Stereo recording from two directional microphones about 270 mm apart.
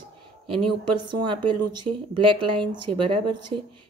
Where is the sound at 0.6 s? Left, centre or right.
Right.